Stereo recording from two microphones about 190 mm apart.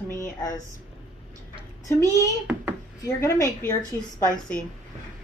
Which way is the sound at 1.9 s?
15° left (ahead or behind).